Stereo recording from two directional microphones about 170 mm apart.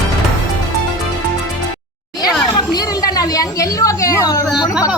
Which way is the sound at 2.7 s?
20° left (ahead or behind).